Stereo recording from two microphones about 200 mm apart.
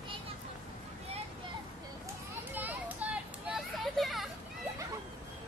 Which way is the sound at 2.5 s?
10° right (ahead or behind).